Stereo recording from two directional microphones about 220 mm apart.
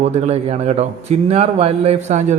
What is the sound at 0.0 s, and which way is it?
A man's voice, 30° right (ahead or behind).